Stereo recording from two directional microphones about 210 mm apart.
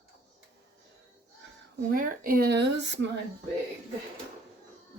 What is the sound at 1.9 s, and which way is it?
Speech, 40° right (ahead or behind).